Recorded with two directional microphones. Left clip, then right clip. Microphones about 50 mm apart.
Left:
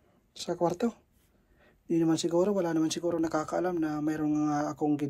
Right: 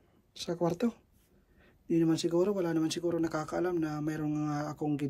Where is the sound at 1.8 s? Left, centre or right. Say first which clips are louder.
Left 1 dB; right.